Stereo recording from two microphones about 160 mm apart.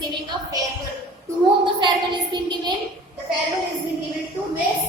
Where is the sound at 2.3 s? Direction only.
30° right (ahead or behind).